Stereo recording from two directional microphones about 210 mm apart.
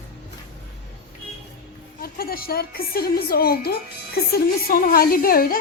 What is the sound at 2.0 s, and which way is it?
A woman's voice, 45° left (ahead or behind).